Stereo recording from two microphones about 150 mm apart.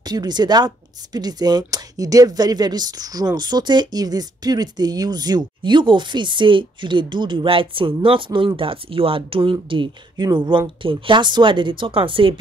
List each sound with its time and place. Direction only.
0.0 s speech: 25° right (ahead or behind)